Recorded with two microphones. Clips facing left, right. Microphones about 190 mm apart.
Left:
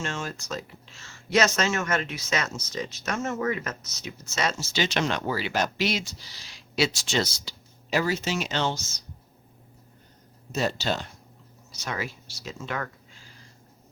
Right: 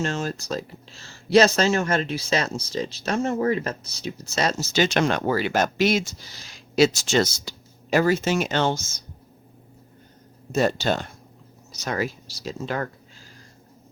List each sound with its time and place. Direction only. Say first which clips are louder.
0.0 s speech: right 6 dB; 40° right (ahead or behind)
10.5 s speech: right 5 dB; 50° right (ahead or behind)
11.7 s speech: right 6 dB; 40° right (ahead or behind)